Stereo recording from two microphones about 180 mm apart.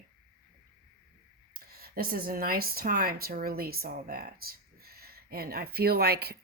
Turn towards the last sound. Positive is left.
turn(degrees=-60)  # may be behind; listen again after turning